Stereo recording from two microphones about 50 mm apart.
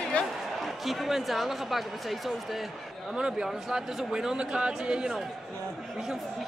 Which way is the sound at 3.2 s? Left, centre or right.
Centre.